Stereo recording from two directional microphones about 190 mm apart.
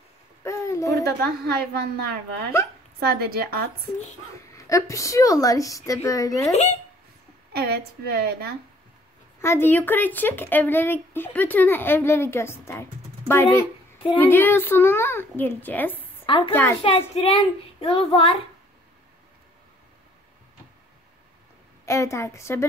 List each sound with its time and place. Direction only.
0.4 s a sound: 15° left (ahead or behind)
1.0 s a woman's voice: 55° right (ahead or behind)
4.6 s speech: 15° left (ahead or behind)
6.5 s a child's voice: 35° left (ahead or behind)
7.5 s a woman's voice: 55° right (ahead or behind)
9.4 s speech: 10° left (ahead or behind)
16.3 s a woman's voice: 25° left (ahead or behind)
21.8 s speech: 15° left (ahead or behind)